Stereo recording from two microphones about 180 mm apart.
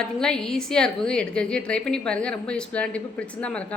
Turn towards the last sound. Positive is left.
turn(degrees=5)  # may be behind; listen again after turning